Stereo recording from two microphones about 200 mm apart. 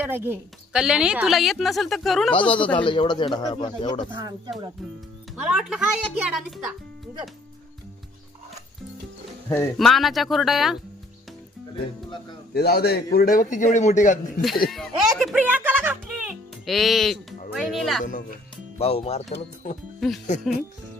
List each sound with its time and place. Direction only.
0.0 s a woman's voice: 10° right (ahead or behind)
2.3 s speech: 25° left (ahead or behind)
4.1 s speech: 20° right (ahead or behind)
5.4 s a woman's voice: 5° right (ahead or behind)
9.5 s a woman's voice: 5° left (ahead or behind)
12.5 s a man's voice: 55° left (ahead or behind)
14.7 s music: centre (ahead or behind)
16.6 s a woman's voice: centre (ahead or behind)
18.8 s speech: 30° left (ahead or behind)
20.0 s a woman's voice: centre (ahead or behind)